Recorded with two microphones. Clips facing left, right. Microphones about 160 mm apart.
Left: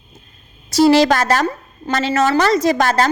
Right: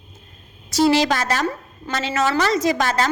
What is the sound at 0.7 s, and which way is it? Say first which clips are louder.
A woman's voice: left 5 dB; 35° left (ahead or behind).